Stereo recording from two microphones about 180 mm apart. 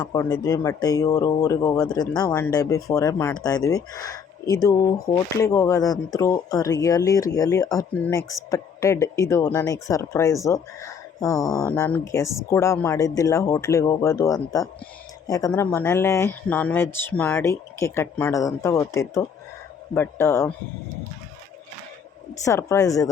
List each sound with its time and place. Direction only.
0.0 s speech: 20° left (ahead or behind)
22.4 s speech: 15° left (ahead or behind)